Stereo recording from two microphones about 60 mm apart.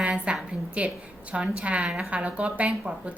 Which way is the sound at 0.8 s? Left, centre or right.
Right.